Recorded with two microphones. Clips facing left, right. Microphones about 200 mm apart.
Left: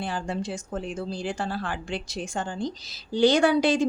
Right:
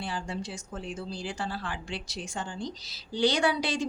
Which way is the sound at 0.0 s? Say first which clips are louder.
Left 5 dB; 50° left (ahead or behind).